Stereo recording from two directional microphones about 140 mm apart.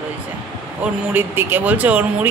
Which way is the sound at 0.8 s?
15° right (ahead or behind).